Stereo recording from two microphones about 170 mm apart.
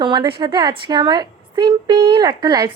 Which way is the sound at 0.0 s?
30° right (ahead or behind).